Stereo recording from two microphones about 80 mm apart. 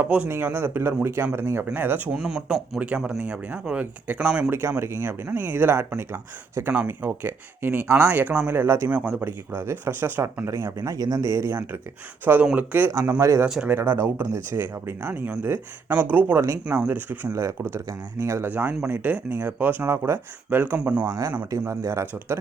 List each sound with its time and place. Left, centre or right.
0.0 s speech: centre
2.1 s speech: centre
4.8 s speech: right
8.9 s speech: centre
9.2 s speech: right
10.8 s speech: right
12.2 s speech: right
13.1 s speech: right; by 17.2 s centre
17.2 s speech: right
18.4 s speech: right
21.1 s speech: right